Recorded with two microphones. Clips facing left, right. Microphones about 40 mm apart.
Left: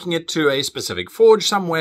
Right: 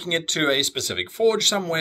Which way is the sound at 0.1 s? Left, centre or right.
Right.